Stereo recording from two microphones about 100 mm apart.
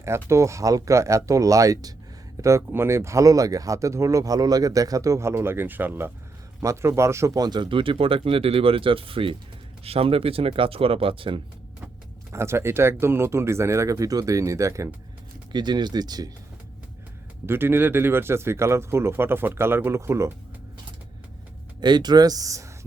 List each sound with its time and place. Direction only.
0.0 s speech: 30° right (ahead or behind); by 9.3 s 65° right (ahead or behind)
9.8 s speech: 80° right; by 11.3 s 60° right (ahead or behind)
12.3 s speech: 25° right (ahead or behind)
15.5 s speech: 45° right (ahead or behind)
17.4 s speech: 25° right (ahead or behind)
21.8 s speech: 45° right (ahead or behind)